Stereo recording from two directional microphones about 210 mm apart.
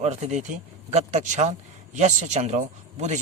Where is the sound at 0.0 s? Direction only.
30° right (ahead or behind).